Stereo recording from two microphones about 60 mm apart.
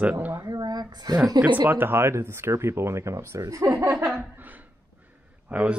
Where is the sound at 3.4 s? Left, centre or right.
Right.